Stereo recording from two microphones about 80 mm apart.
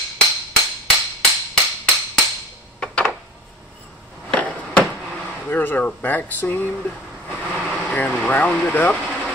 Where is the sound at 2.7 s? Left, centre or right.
Centre.